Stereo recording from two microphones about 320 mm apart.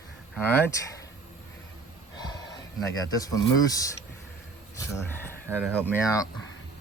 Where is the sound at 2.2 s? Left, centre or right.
Centre.